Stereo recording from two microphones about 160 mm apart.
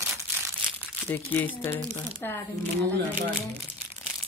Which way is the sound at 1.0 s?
10° left (ahead or behind).